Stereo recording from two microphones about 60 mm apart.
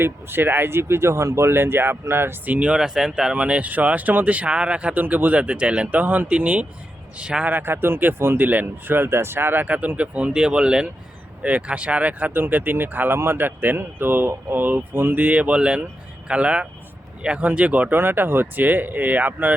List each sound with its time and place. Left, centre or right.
0.0 s speech: right
2.5 s speech: right
3.3 s speech: right
7.4 s speech: right
9.6 s speech: right